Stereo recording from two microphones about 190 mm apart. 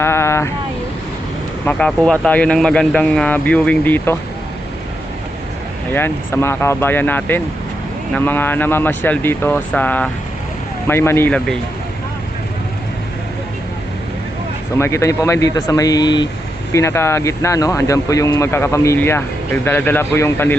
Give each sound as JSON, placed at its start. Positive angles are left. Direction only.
{"t": 0.0, "sound": "vehicle", "side_deg": 15}
{"t": 1.6, "sound": "speech", "side_deg": 5}
{"t": 5.9, "sound": "speech", "side_deg": 10}
{"t": 14.8, "sound": "speech", "side_deg": 15}